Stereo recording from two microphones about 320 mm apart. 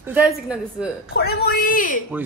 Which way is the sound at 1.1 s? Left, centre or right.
Left.